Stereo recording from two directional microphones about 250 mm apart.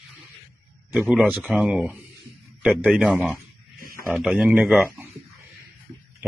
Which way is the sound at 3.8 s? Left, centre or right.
Right.